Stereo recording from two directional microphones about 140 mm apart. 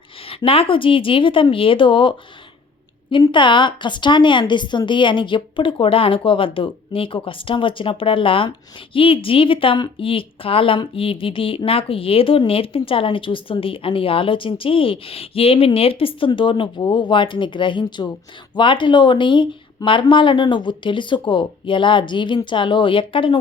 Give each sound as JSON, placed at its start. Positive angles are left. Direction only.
{"t": 0.3, "sound": "a woman's voice", "side_deg": 40}